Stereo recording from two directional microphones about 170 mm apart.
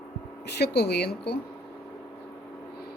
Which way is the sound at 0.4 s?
75° left (ahead or behind).